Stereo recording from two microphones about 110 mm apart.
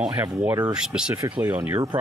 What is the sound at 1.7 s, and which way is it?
Speech, 40° right (ahead or behind).